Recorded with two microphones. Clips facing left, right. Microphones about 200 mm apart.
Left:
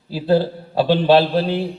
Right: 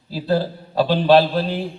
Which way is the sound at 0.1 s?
45° right (ahead or behind).